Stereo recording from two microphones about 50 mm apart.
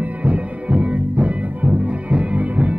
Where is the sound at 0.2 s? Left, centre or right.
Right.